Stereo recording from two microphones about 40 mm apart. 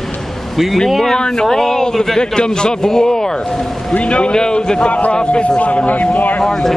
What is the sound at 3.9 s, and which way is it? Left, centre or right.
Speech, left.